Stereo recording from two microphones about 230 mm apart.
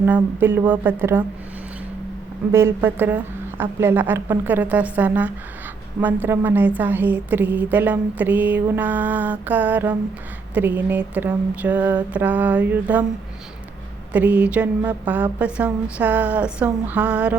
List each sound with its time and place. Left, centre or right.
0.0 s a woman's voice: centre
2.5 s a woman's voice: centre
14.1 s speech: centre